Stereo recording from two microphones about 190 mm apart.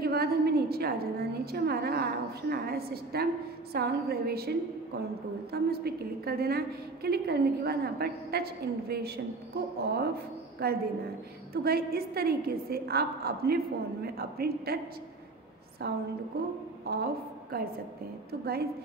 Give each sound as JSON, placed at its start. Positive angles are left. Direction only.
{"t": 0.0, "sound": "a sound", "side_deg": -55}
{"t": 2.5, "sound": "a woman's voice", "side_deg": -55}
{"t": 15.8, "sound": "a woman's voice", "side_deg": -55}